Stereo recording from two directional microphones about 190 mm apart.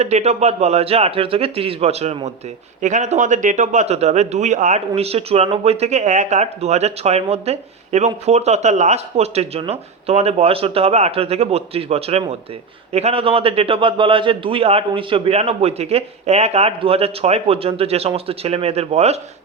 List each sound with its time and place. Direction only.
0.0 s a man's voice: 35° right (ahead or behind)